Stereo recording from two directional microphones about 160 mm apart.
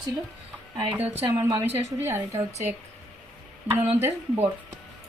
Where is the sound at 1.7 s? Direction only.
15° right (ahead or behind).